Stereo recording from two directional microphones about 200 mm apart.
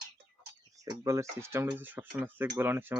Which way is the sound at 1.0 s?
15° right (ahead or behind).